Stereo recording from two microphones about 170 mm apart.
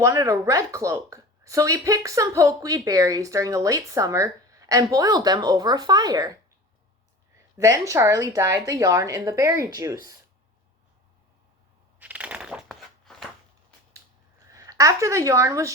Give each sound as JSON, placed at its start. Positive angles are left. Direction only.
{"t": 0.0, "sound": "a woman's voice", "side_deg": -20}
{"t": 7.3, "sound": "a woman's voice", "side_deg": -20}
{"t": 11.9, "sound": "crushing", "side_deg": -10}
{"t": 14.5, "sound": "speech", "side_deg": -20}